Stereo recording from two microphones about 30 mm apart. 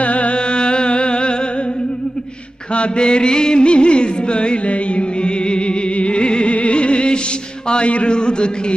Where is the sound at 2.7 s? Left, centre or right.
Left.